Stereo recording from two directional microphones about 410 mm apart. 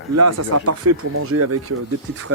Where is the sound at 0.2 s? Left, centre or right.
Right.